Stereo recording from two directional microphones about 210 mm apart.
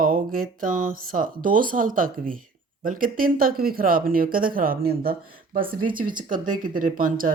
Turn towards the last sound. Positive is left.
turn(degrees=-40)  # may be behind; listen again after turning